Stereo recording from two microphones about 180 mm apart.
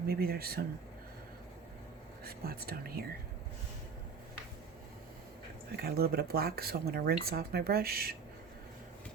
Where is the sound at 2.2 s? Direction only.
55° right (ahead or behind).